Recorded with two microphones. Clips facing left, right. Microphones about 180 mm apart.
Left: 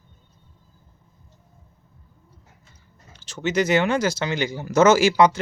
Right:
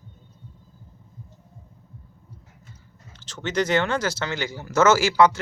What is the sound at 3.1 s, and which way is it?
Speech, 10° left (ahead or behind).